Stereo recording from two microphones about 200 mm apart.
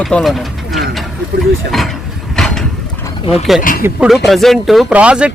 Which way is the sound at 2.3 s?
Centre (ahead or behind).